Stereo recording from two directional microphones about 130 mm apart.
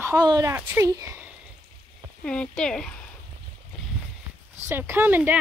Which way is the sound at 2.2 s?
10° left (ahead or behind).